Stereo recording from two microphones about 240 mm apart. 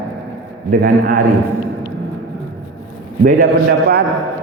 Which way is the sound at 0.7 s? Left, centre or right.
Right.